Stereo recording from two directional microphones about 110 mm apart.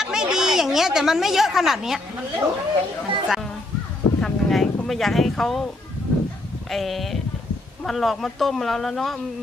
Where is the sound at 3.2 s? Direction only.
5° right (ahead or behind).